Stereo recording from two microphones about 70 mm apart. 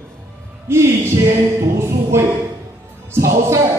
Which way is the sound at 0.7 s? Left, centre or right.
Right.